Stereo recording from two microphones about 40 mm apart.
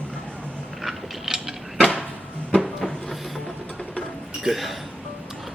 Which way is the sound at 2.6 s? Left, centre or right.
Centre.